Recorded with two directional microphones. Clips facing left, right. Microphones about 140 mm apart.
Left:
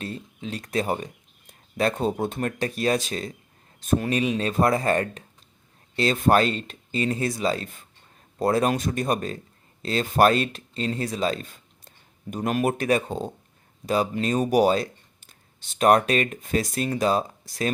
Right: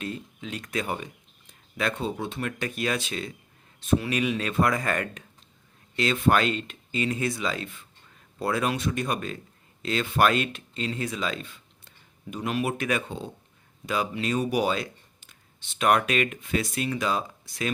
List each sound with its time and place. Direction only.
0.0 s speech: 35° left (ahead or behind)
4.2 s speech: 30° left (ahead or behind)